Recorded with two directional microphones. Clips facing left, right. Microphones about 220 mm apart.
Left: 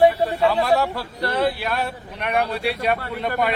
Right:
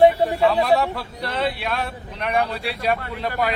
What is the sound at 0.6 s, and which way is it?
Speech, centre (ahead or behind).